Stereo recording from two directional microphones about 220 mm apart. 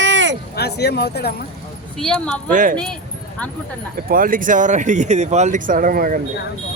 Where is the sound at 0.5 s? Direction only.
45° left (ahead or behind).